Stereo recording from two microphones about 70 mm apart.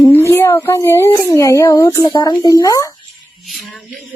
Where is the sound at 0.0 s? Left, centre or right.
Left.